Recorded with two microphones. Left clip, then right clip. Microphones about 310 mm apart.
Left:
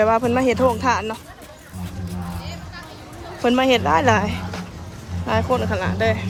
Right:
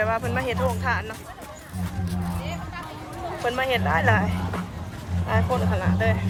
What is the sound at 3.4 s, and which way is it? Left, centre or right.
Speech, centre.